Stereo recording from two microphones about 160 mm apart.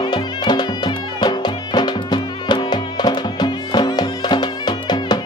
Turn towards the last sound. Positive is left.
turn(degrees=25)  # may be behind; listen again after turning